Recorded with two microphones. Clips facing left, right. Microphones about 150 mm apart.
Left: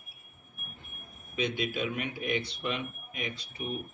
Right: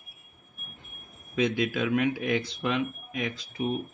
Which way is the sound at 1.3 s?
90° right.